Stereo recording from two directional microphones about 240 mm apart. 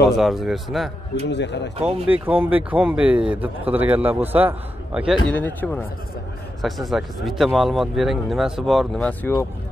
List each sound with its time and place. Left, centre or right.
0.2 s speech: centre
1.3 s speech: left
2.0 s speech: centre